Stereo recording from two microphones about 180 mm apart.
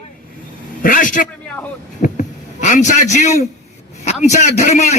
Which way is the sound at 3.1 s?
40° left (ahead or behind).